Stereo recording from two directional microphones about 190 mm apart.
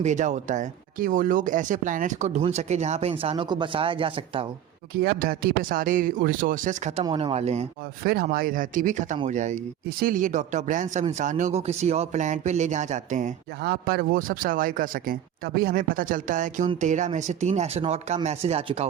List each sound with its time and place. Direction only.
0.0 s speech: 40° right (ahead or behind)
5.0 s speech: 50° right (ahead or behind)
7.0 s speech: 25° right (ahead or behind)
8.0 s speech: 50° right (ahead or behind)
13.6 s speech: 55° right (ahead or behind); by 18.9 s 35° right (ahead or behind)